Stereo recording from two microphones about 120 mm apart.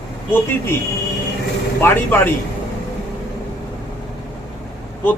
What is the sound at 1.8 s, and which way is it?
Speech, 20° left (ahead or behind).